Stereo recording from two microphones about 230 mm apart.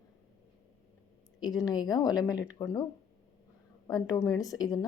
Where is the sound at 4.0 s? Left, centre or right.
Centre.